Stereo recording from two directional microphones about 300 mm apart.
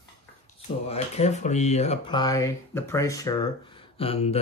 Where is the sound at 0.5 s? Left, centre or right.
Centre.